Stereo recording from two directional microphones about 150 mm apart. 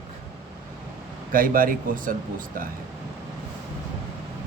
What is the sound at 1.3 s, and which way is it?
Speech, 70° right (ahead or behind).